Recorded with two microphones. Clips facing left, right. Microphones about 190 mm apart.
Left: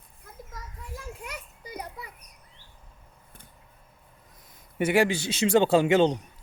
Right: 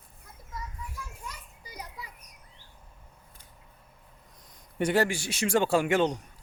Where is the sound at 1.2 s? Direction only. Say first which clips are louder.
Left 4 dB; 65° left (ahead or behind).